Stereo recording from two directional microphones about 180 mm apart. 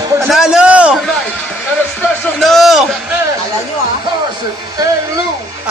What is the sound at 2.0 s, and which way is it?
Speech, centre (ahead or behind).